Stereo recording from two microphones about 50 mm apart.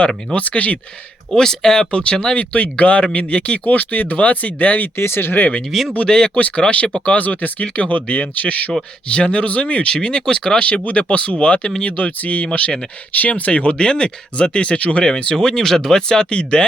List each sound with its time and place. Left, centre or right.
0.3 s speech: left
1.4 s speech: centre; by 4.9 s left
4.9 s speech: left
5.7 s speech: centre
6.1 s speech: centre
7.2 s speech: left